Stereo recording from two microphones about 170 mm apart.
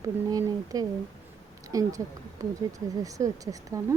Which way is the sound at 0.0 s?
20° right (ahead or behind).